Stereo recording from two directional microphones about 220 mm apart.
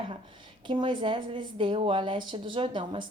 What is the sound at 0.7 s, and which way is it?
A woman's voice, 20° right (ahead or behind).